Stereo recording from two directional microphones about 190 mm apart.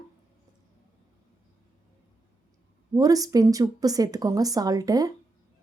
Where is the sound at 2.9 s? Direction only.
20° right (ahead or behind).